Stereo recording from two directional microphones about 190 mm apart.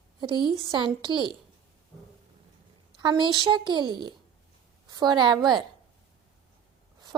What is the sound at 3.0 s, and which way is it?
A child's voice, 25° right (ahead or behind).